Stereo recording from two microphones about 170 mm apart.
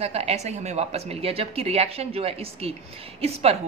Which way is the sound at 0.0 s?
40° right (ahead or behind).